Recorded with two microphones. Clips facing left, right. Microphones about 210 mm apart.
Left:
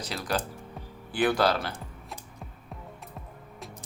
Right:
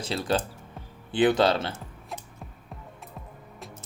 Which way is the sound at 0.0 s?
25° right (ahead or behind).